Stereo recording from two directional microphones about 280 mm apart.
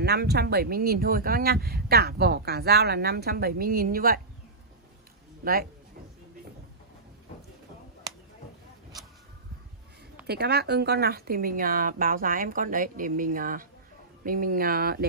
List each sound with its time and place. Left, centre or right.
0.0 s speech: right
5.4 s a man's voice: right
10.2 s speech: right